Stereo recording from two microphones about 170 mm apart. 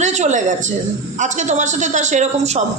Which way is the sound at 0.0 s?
45° right (ahead or behind).